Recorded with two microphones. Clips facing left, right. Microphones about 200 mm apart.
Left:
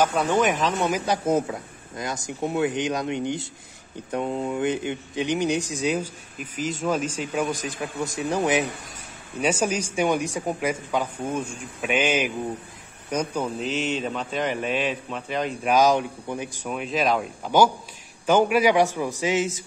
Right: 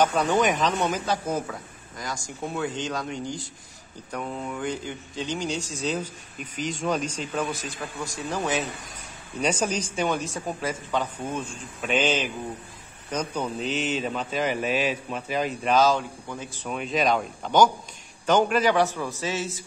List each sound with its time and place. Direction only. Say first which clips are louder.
0.0 s a man's voice: left 1 dB; 5° left (ahead or behind)
15.6 s speech: left 2 dB; 15° left (ahead or behind)
16.7 s a man's voice: even; centre (ahead or behind); by 19.5 s 15° left (ahead or behind)